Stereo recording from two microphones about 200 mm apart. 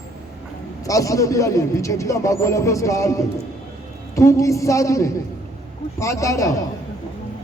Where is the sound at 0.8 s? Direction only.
15° left (ahead or behind).